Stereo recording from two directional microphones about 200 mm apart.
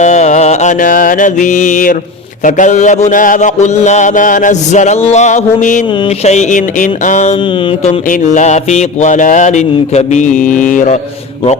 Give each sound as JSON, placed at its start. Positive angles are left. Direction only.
{"t": 0.0, "sound": "mantra", "side_deg": 35}